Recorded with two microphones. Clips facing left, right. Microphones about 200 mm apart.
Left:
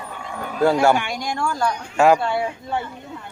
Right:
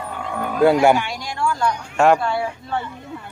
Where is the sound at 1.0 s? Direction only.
50° left (ahead or behind).